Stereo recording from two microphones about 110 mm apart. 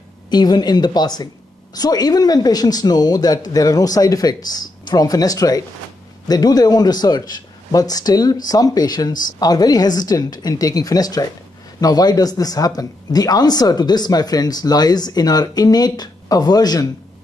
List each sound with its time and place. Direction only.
0.3 s a woman's voice: 40° left (ahead or behind)